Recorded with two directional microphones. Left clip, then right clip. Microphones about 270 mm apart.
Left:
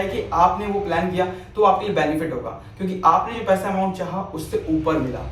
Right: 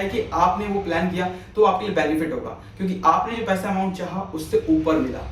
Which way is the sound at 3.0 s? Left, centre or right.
Centre.